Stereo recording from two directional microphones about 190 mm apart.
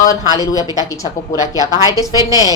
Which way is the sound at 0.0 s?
20° left (ahead or behind).